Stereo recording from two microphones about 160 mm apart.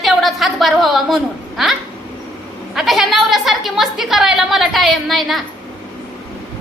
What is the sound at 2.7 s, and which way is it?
A woman's voice, centre (ahead or behind).